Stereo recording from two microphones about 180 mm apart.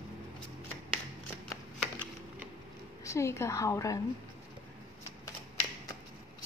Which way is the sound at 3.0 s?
15° left (ahead or behind).